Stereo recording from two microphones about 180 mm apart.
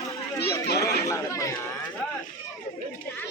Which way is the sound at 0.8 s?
20° left (ahead or behind).